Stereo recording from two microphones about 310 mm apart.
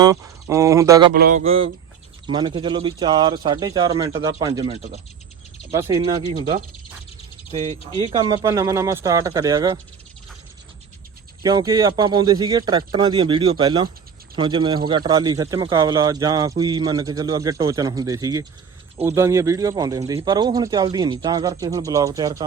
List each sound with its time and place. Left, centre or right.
0.0 s speech: centre
1.1 s speech: right; by 9.7 s centre
11.4 s speech: centre